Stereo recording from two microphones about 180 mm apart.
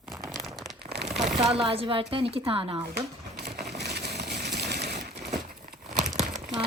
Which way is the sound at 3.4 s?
65° right (ahead or behind).